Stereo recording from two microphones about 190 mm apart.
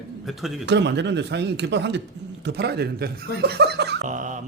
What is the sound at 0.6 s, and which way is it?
Speech, 65° right (ahead or behind).